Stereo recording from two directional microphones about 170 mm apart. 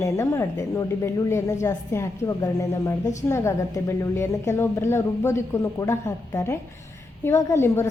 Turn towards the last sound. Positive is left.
turn(degrees=15)  # may be behind; listen again after turning